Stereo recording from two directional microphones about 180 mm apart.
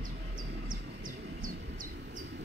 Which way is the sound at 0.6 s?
50° right (ahead or behind).